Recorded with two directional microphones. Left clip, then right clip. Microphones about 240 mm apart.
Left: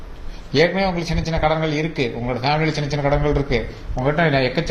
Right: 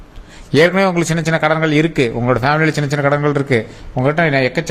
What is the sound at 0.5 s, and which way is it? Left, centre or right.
A man's voice, right.